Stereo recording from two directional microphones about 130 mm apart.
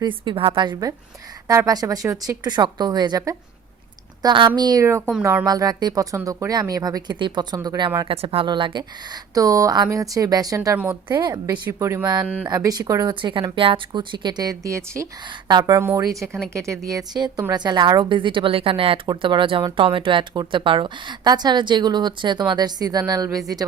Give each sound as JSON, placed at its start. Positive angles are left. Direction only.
{"t": 0.0, "sound": "a woman's voice", "side_deg": -40}
{"t": 2.0, "sound": "a woman's voice", "side_deg": -20}
{"t": 2.4, "sound": "speech", "side_deg": -35}
{"t": 8.4, "sound": "speech", "side_deg": -35}
{"t": 9.3, "sound": "a woman's voice", "side_deg": -25}
{"t": 11.6, "sound": "a woman's voice", "side_deg": -20}
{"t": 12.2, "sound": "speech", "side_deg": -10}
{"t": 12.5, "sound": "a woman's voice", "side_deg": -30}